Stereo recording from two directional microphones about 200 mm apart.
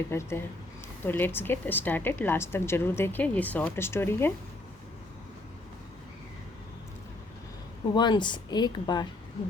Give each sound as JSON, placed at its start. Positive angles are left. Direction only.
{"t": 0.1, "sound": "speech", "side_deg": 10}
{"t": 7.9, "sound": "speech", "side_deg": 20}